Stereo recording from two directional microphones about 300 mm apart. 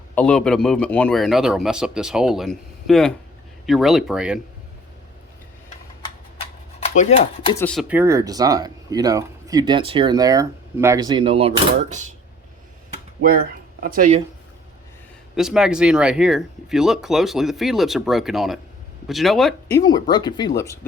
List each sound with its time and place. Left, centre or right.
0.2 s speech: centre
6.4 s a sound: left
7.6 s speech: centre; by 12.1 s right
13.8 s speech: right
15.4 s speech: centre
19.8 s speech: centre